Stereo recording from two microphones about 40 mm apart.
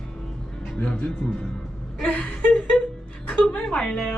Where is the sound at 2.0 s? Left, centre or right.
Left.